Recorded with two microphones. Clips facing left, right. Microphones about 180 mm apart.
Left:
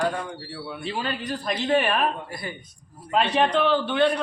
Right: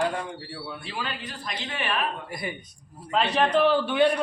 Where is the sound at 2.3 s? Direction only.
20° right (ahead or behind).